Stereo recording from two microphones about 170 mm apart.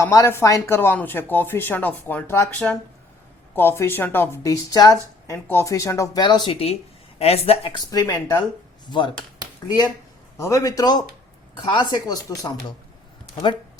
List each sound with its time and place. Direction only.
0.0 s a woman's voice: 20° left (ahead or behind); by 7.8 s 35° left (ahead or behind)
7.9 s speech: 20° left (ahead or behind)
10.4 s speech: 20° left (ahead or behind)